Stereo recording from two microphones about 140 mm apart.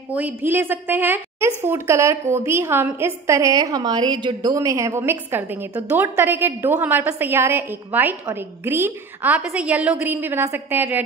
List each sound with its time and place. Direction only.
0.1 s a woman's voice: 10° right (ahead or behind)